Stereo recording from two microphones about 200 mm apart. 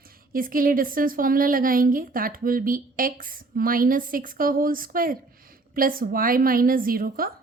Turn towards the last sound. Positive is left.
turn(degrees=-45)  # may be behind; listen again after turning